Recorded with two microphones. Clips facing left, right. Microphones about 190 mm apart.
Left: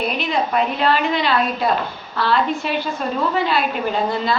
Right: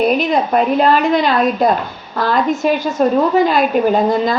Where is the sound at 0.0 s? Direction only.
50° right (ahead or behind).